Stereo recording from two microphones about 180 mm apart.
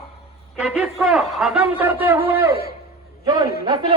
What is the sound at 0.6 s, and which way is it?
A man's voice, 5° right (ahead or behind).